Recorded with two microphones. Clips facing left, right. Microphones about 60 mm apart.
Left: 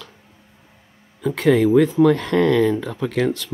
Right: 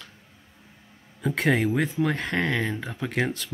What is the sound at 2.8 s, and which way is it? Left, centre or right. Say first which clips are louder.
Speech: left 7 dB; left.